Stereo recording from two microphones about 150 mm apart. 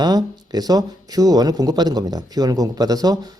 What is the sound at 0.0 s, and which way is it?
Speech, 25° right (ahead or behind).